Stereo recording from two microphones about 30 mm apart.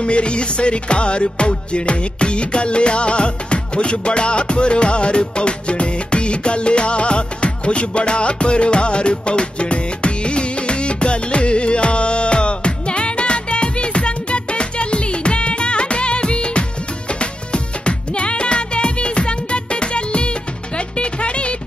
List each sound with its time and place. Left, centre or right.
0.0 s music: left